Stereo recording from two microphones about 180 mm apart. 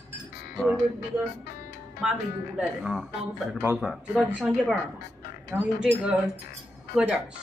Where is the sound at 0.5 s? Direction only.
Centre (ahead or behind).